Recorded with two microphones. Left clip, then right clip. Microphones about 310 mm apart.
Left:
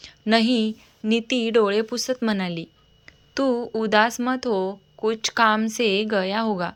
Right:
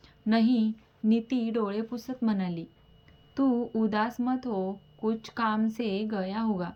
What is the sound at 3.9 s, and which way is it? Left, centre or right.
A woman's voice, centre.